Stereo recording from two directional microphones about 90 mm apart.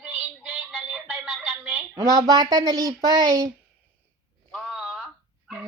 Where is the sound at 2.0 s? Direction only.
40° right (ahead or behind).